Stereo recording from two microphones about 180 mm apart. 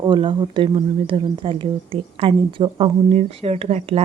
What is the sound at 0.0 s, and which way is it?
Speech, 25° right (ahead or behind).